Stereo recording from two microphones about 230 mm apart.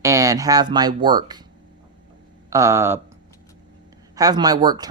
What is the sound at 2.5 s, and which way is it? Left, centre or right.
Speech, centre.